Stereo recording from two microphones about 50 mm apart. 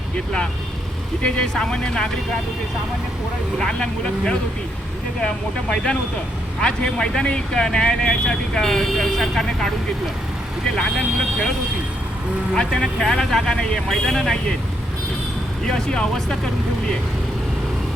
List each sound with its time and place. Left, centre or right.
1.2 s speech: centre
3.6 s speech: centre
5.7 s speech: centre
10.8 s speech: centre
12.5 s speech: centre
15.6 s speech: centre